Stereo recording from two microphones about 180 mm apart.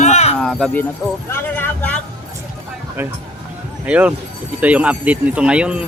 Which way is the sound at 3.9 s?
10° right (ahead or behind).